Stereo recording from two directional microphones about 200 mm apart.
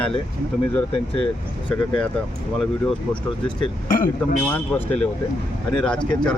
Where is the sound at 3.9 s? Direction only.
45° left (ahead or behind).